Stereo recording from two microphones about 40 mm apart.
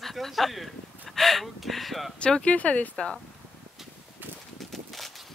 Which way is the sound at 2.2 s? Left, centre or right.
Left.